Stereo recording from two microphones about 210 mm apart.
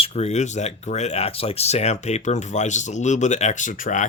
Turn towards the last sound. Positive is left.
turn(degrees=35)  # may be behind; listen again after turning